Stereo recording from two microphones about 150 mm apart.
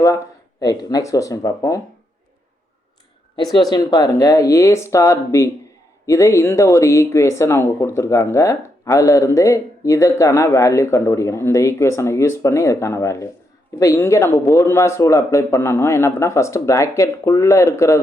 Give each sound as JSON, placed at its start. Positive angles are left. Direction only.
{"t": 0.6, "sound": "speech", "side_deg": 25}
{"t": 3.7, "sound": "speech", "side_deg": 25}